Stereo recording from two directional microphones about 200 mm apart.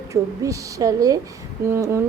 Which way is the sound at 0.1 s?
15° right (ahead or behind).